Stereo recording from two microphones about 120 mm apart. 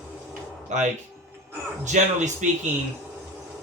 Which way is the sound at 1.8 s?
90° right.